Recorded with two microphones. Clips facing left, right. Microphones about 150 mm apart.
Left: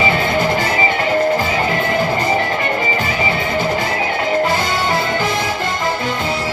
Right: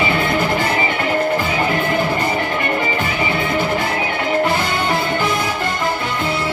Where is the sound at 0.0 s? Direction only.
55° right (ahead or behind).